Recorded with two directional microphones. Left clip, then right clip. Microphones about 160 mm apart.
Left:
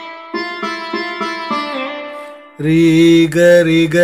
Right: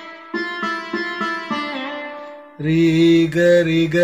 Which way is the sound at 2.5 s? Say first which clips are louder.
Left 5 dB; 45° left (ahead or behind).